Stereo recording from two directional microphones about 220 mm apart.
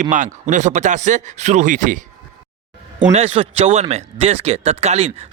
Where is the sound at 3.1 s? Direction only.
30° right (ahead or behind).